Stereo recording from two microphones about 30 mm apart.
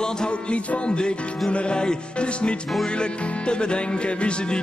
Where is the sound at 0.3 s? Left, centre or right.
Left.